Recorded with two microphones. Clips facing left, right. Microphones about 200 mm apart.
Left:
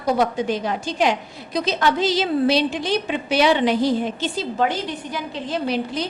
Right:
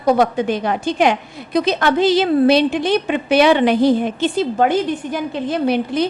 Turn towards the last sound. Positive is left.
turn(degrees=-55)  # may be behind; listen again after turning